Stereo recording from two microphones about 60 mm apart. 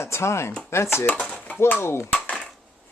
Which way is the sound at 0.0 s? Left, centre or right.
Left.